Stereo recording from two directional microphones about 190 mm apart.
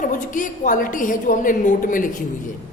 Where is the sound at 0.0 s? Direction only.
45° left (ahead or behind).